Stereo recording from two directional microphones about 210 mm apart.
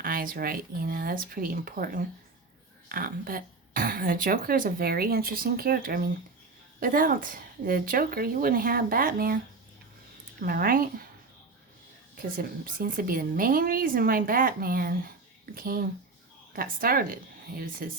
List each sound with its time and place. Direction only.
0.0 s speech: 45° right (ahead or behind)
10.4 s speech: 45° right (ahead or behind)
12.1 s speech: 40° right (ahead or behind)